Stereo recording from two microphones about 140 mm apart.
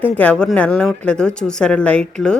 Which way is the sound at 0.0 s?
10° left (ahead or behind).